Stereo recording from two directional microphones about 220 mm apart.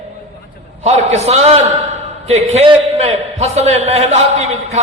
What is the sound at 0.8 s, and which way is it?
A man's voice, 30° right (ahead or behind).